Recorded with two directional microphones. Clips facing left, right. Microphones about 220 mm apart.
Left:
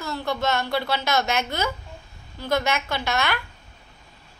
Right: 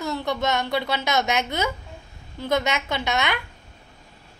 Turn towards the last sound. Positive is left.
turn(degrees=-20)  # may be behind; listen again after turning